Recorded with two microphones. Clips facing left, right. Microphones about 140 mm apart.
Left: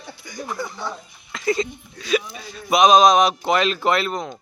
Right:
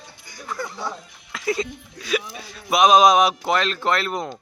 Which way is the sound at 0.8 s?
10° right (ahead or behind).